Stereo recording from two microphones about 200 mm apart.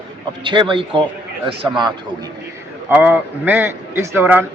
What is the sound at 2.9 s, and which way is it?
A man's voice, 10° right (ahead or behind).